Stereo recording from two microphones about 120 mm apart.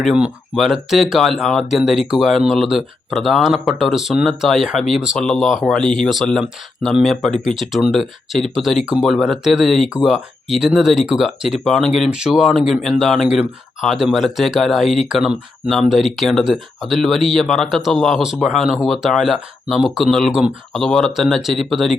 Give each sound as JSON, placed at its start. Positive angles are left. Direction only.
{"t": 0.0, "sound": "speech", "side_deg": -5}